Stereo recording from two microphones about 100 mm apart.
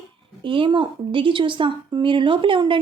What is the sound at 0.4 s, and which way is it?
A woman's voice, 60° right (ahead or behind).